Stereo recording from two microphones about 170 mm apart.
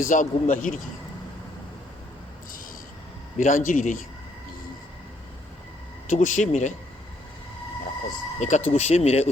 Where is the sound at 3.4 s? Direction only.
50° left (ahead or behind).